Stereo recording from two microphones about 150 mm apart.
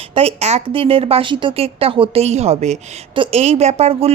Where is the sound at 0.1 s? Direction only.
40° right (ahead or behind).